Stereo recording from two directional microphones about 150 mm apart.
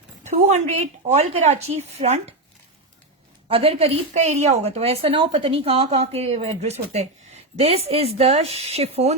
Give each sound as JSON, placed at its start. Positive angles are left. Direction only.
{"t": 0.3, "sound": "a woman's voice", "side_deg": -50}
{"t": 3.5, "sound": "a woman's voice", "side_deg": -40}